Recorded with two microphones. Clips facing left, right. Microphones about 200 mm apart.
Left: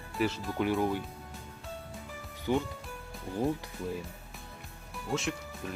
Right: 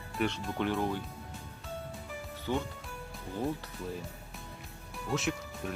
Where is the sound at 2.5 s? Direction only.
15° left (ahead or behind).